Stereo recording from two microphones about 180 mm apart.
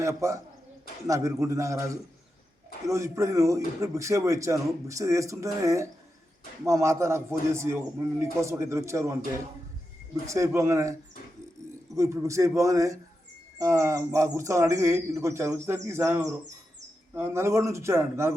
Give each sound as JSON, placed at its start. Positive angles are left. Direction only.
{"t": 0.0, "sound": "speech", "side_deg": -15}
{"t": 10.2, "sound": "speech", "side_deg": -15}
{"t": 11.9, "sound": "speech", "side_deg": -15}